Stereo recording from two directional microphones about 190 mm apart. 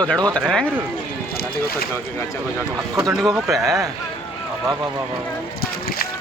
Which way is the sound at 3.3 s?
Centre (ahead or behind).